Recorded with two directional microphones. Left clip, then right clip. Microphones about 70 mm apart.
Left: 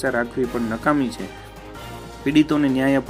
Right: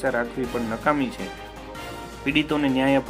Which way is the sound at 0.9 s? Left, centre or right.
Left.